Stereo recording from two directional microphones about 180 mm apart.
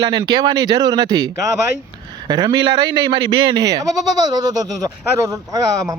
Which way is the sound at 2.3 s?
25° right (ahead or behind).